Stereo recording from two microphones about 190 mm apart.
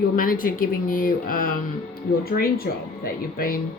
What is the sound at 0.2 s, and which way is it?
A woman's voice, 45° left (ahead or behind).